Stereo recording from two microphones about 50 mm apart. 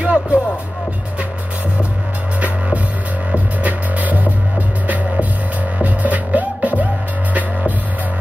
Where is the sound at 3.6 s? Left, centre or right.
Right.